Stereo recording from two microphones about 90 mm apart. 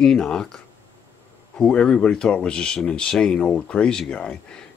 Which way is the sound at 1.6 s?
10° left (ahead or behind).